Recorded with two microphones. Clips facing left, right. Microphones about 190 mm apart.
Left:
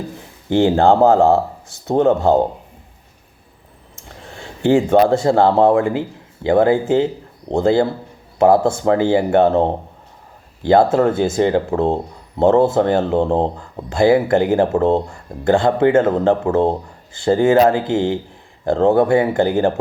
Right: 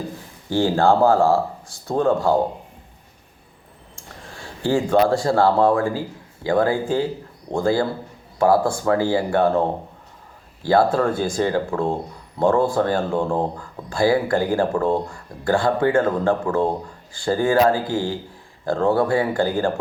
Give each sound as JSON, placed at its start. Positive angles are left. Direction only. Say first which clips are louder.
{"t": 0.5, "sound": "speech", "louder": "left 4 dB", "side_deg": 20}
{"t": 3.9, "sound": "speech", "louder": "left 3 dB", "side_deg": 20}